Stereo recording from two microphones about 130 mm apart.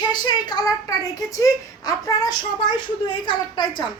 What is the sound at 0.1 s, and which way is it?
Speech, 30° left (ahead or behind).